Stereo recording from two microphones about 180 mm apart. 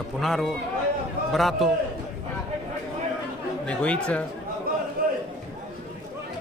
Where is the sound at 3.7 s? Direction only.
5° left (ahead or behind).